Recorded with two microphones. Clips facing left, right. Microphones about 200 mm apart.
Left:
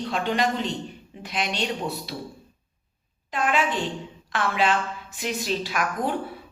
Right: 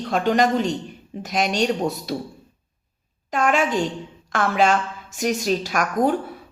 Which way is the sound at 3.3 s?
45° right (ahead or behind).